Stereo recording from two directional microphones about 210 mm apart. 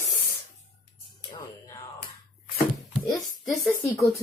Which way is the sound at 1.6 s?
15° left (ahead or behind).